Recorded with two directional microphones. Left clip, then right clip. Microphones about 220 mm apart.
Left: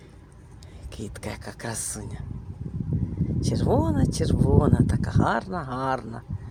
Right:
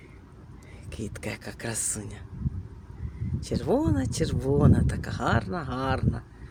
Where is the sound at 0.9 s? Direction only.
5° left (ahead or behind).